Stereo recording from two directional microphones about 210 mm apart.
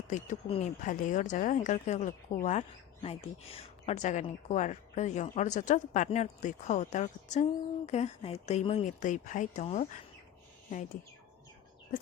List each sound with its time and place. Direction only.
0.1 s speech: 30° left (ahead or behind)